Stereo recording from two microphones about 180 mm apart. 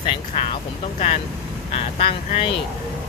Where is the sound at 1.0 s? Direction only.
35° left (ahead or behind).